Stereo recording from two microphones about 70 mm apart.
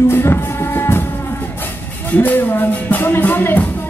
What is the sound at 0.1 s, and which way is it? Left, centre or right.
Music, left.